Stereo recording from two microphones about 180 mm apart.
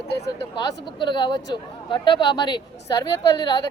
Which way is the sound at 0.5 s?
25° left (ahead or behind).